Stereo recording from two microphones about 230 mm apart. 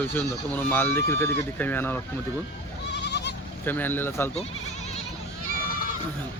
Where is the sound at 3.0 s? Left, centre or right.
Left.